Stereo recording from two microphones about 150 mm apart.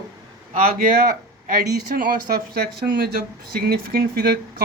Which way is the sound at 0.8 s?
70° right (ahead or behind).